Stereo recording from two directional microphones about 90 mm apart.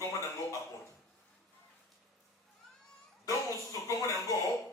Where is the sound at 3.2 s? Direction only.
40° left (ahead or behind).